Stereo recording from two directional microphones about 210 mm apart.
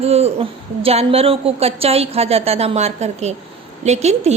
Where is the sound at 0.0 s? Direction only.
30° right (ahead or behind).